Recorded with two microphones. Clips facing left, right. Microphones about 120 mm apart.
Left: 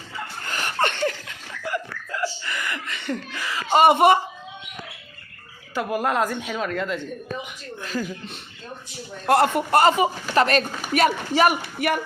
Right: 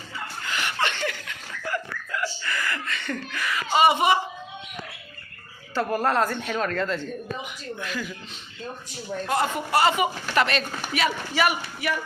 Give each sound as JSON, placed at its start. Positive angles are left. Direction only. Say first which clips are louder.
{"t": 0.4, "sound": "chuckle", "louder": "left 3 dB", "side_deg": 45}
{"t": 1.6, "sound": "a sound", "louder": "left 2 dB", "side_deg": 25}
{"t": 3.8, "sound": "speech", "louder": "left 4 dB", "side_deg": 50}
{"t": 5.7, "sound": "speech", "louder": "even", "side_deg": 10}
{"t": 7.8, "sound": "speech", "louder": "left 5 dB", "side_deg": 40}
{"t": 9.2, "sound": "speech", "louder": "left 7 dB", "side_deg": 65}
{"t": 9.7, "sound": "speech", "louder": "left 3 dB", "side_deg": 40}